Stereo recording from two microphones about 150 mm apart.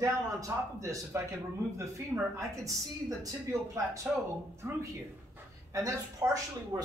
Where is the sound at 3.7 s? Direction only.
20° right (ahead or behind).